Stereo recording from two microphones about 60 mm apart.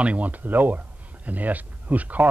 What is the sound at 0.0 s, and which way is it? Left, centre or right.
Speech, right.